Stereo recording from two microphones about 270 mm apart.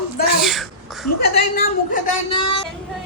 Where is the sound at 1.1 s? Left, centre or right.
Left.